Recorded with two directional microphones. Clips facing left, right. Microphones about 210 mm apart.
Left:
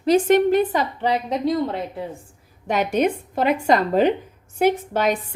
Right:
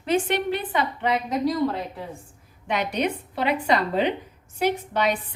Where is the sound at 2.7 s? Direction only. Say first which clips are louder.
Left 5 dB; 45° left (ahead or behind).